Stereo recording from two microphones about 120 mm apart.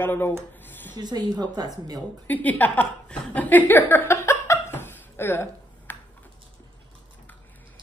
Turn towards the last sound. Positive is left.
turn(degrees=15)  # may be behind; listen again after turning